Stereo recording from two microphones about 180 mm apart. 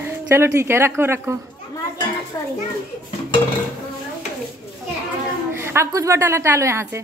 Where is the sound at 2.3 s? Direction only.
20° left (ahead or behind).